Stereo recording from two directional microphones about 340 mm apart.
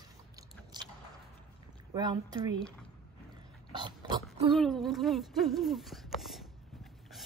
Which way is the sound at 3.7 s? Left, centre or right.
Centre.